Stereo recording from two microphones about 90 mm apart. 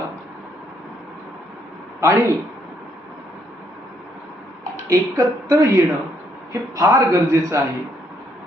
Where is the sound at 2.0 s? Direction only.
30° right (ahead or behind).